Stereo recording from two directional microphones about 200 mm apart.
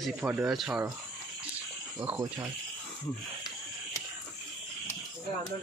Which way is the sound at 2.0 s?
10° right (ahead or behind).